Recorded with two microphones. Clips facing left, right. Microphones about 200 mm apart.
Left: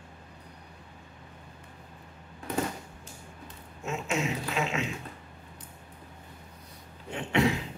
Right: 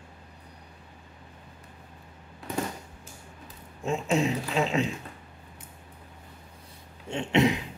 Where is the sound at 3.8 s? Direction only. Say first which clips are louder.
Right 5 dB; 35° right (ahead or behind).